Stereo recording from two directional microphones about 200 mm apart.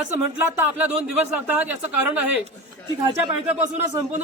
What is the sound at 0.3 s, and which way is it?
Speech, 10° right (ahead or behind).